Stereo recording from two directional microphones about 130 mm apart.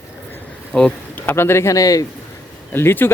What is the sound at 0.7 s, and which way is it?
Speech, 10° left (ahead or behind).